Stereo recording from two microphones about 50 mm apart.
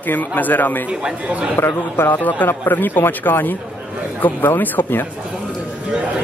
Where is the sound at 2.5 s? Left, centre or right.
Left.